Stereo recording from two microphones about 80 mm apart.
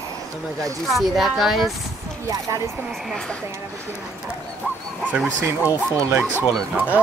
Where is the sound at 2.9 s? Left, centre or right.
Centre.